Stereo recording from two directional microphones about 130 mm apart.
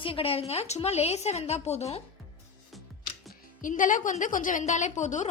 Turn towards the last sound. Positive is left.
turn(degrees=70)  # may be behind; listen again after turning